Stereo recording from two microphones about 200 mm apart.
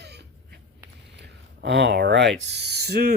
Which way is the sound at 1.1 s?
55° right (ahead or behind).